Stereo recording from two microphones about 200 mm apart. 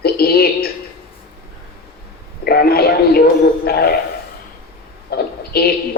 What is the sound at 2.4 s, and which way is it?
A man's voice, 50° left (ahead or behind).